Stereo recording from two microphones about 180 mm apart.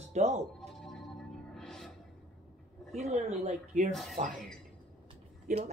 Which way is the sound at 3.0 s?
40° right (ahead or behind).